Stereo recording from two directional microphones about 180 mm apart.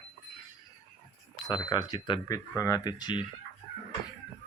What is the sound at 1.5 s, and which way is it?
Speech, 25° left (ahead or behind).